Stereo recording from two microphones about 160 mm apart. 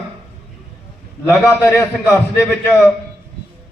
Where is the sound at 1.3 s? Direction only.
15° left (ahead or behind).